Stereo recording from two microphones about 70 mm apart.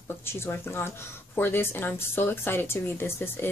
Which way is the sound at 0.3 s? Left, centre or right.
Left.